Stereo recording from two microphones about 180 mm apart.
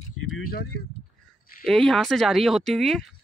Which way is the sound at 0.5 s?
55° left (ahead or behind).